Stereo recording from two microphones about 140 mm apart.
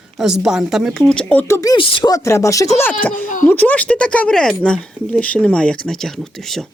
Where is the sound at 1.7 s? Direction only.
35° left (ahead or behind).